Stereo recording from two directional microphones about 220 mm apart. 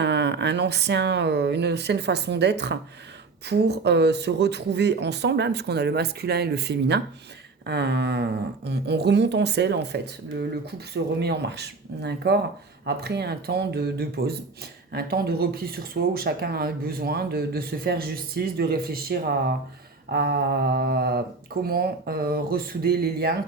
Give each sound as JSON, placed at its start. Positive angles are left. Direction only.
{"t": 0.0, "sound": "speech", "side_deg": -50}